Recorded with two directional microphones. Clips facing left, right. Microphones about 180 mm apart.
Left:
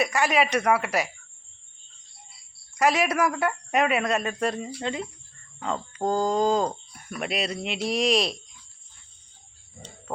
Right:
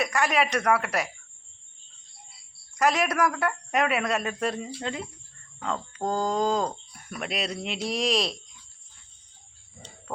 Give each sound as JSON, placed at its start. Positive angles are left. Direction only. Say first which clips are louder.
{"t": 0.0, "sound": "speech", "louder": "left 2 dB", "side_deg": 0}
{"t": 2.7, "sound": "speech", "louder": "left 1 dB", "side_deg": 5}